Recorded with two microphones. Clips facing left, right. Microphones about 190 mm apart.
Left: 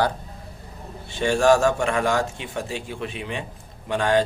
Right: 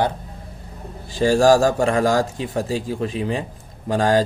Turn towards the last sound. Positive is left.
turn(degrees=-35)  # may be behind; listen again after turning